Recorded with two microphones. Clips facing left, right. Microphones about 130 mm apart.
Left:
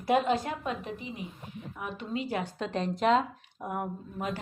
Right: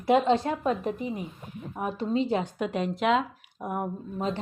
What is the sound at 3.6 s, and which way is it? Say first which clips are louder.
Speech: right 3 dB; 20° right (ahead or behind).